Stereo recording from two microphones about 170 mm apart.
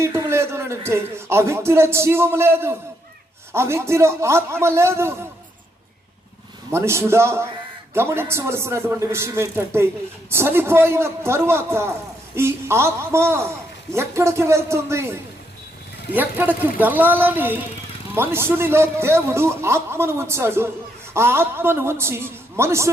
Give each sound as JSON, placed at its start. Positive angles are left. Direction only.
{"t": 0.0, "sound": "a man's voice", "side_deg": -15}
{"t": 6.7, "sound": "a man's voice", "side_deg": -15}